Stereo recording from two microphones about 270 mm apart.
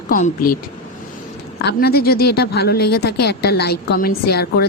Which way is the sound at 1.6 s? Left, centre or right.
Left.